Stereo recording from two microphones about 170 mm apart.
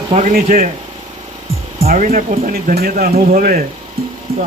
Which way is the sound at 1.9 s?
55° right (ahead or behind).